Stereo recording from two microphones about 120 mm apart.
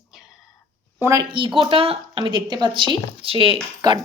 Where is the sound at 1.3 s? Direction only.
45° right (ahead or behind).